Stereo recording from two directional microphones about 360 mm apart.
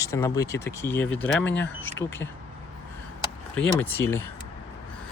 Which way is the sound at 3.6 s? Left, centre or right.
Centre.